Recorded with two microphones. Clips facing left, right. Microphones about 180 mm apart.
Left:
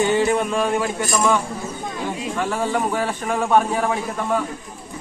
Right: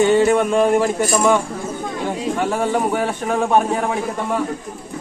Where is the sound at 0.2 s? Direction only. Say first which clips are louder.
Right 5 dB; 45° right (ahead or behind).